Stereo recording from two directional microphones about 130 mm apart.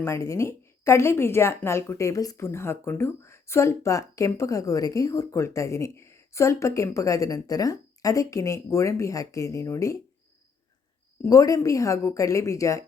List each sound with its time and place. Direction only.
0.0 s a woman's voice: 20° left (ahead or behind)
11.2 s a woman's voice: 25° left (ahead or behind)